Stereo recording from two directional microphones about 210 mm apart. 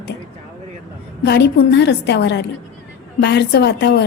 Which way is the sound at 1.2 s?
55° left (ahead or behind).